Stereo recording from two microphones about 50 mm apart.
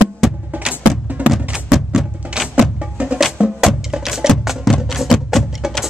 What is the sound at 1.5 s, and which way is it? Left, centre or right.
Music, centre.